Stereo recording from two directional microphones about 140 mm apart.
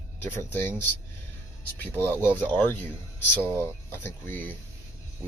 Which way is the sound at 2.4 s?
15° left (ahead or behind).